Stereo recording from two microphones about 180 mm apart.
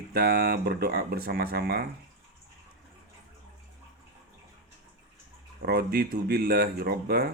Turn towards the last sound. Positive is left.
turn(degrees=-60)  # may be behind; listen again after turning